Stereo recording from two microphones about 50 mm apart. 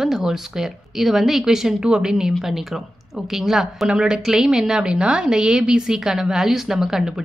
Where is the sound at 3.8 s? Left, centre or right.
Centre.